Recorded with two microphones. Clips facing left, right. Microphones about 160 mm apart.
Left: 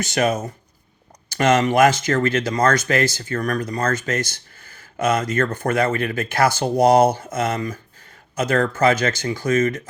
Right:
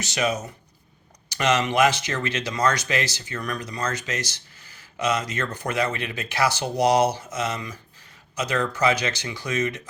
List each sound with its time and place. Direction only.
0.0 s speech: 50° left (ahead or behind)